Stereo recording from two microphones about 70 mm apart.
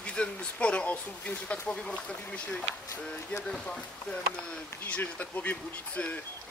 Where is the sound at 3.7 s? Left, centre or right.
Centre.